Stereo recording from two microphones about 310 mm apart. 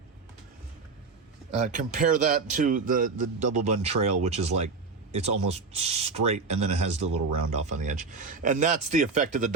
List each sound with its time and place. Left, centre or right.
1.5 s speech: right